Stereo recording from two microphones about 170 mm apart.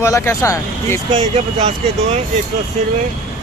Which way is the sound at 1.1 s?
40° right (ahead or behind).